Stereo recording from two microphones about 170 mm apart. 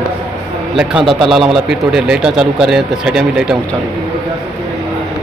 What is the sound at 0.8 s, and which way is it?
Speech, 5° right (ahead or behind).